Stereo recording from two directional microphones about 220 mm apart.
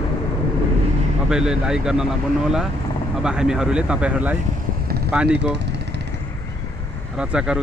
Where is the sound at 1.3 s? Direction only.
5° right (ahead or behind).